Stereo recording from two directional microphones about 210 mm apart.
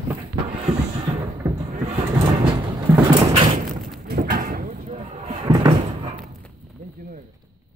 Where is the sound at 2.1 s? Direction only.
15° right (ahead or behind).